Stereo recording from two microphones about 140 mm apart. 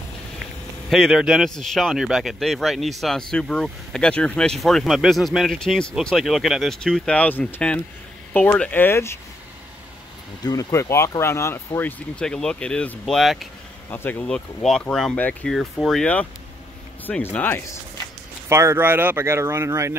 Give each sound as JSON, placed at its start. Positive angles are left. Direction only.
{"t": 0.4, "sound": "a man's voice", "side_deg": 0}
{"t": 10.4, "sound": "speech", "side_deg": 25}
{"t": 13.8, "sound": "speech", "side_deg": 15}
{"t": 18.5, "sound": "speech", "side_deg": -20}